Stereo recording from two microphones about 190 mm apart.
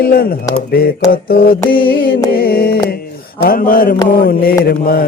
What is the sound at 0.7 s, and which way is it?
Mantra, 55° left (ahead or behind).